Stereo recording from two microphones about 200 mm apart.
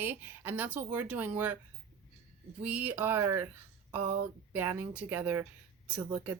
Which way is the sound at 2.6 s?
10° right (ahead or behind).